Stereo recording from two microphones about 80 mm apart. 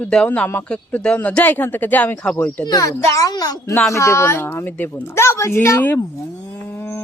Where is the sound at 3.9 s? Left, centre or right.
Left.